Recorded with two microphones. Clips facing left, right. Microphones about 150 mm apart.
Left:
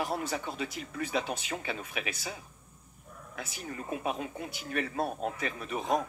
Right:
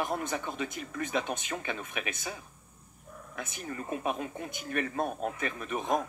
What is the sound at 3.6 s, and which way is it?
Speech, 45° right (ahead or behind).